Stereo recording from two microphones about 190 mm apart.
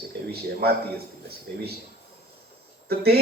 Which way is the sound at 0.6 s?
55° right (ahead or behind).